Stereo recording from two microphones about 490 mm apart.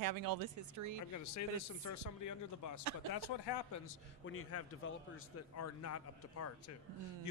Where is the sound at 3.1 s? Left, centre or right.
Left.